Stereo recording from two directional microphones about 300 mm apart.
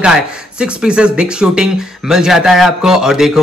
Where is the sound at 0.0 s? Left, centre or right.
Centre.